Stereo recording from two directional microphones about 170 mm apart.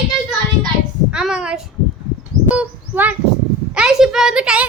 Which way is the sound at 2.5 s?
10° right (ahead or behind).